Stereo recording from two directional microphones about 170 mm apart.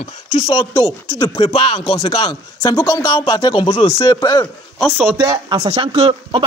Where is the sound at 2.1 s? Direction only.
35° left (ahead or behind).